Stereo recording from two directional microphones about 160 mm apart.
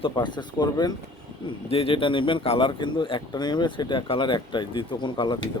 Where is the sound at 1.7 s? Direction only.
35° left (ahead or behind).